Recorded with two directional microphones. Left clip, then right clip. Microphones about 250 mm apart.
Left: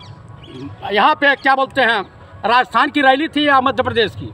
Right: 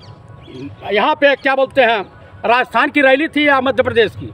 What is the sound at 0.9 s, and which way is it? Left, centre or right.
Speech, centre.